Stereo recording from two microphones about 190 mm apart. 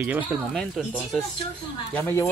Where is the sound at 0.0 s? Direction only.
10° right (ahead or behind).